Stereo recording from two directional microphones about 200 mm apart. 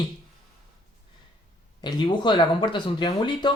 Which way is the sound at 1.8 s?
25° left (ahead or behind).